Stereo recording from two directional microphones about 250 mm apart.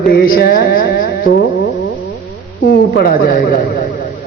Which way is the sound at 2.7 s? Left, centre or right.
Left.